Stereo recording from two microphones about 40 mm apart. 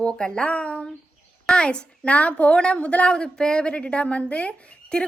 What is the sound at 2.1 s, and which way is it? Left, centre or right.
Speech, left.